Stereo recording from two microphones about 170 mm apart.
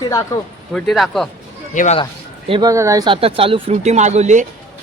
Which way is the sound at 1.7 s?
45° left (ahead or behind).